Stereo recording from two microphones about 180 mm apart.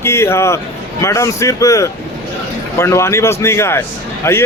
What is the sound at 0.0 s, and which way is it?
Speech, 15° left (ahead or behind).